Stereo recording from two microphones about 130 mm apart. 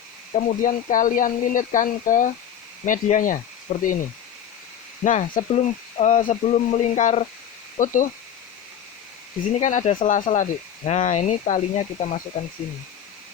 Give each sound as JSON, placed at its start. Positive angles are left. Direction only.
{"t": 0.3, "sound": "speech", "side_deg": 85}
{"t": 3.7, "sound": "speech", "side_deg": 55}
{"t": 5.0, "sound": "speech", "side_deg": 70}
{"t": 7.8, "sound": "speech", "side_deg": 90}
{"t": 9.6, "sound": "speech", "side_deg": 70}